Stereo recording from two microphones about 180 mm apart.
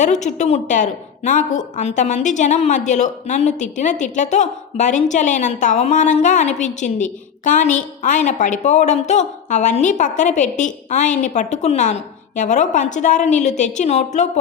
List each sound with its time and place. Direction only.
0.0 s a woman's voice: 40° left (ahead or behind)